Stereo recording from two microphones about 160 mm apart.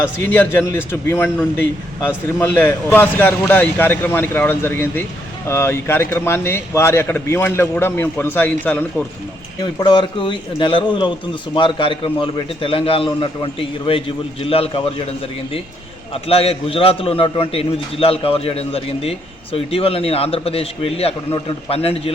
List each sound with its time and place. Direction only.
0.0 s a man's voice: 10° left (ahead or behind)
9.8 s a man's voice: 30° left (ahead or behind)
16.3 s a man's voice: 35° left (ahead or behind)